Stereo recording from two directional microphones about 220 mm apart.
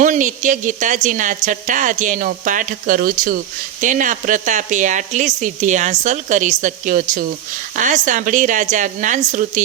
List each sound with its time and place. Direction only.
0.0 s speech: 35° right (ahead or behind)